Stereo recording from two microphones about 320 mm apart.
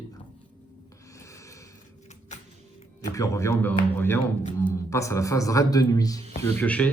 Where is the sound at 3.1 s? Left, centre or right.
Centre.